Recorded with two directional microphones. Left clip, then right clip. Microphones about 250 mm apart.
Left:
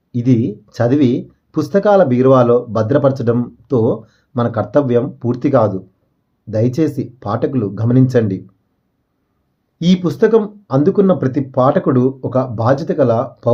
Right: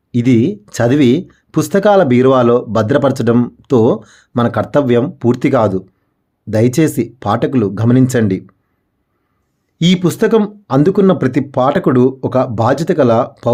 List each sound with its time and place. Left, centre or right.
0.1 s speech: right
9.7 s speech: right